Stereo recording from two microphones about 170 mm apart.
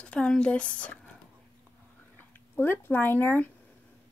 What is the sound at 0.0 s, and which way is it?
Speech, 5° left (ahead or behind).